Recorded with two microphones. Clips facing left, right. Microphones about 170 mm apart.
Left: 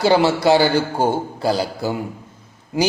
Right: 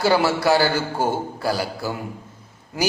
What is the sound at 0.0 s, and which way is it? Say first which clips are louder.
A man's voice: left 3 dB; 20° left (ahead or behind).